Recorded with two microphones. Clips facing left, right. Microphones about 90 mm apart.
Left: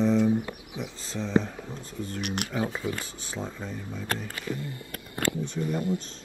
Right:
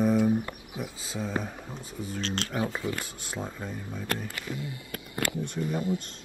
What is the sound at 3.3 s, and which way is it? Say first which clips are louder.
Speech: left 1 dB; 5° right (ahead or behind).